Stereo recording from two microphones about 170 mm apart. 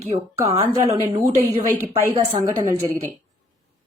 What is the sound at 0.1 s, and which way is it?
Speech, 35° right (ahead or behind).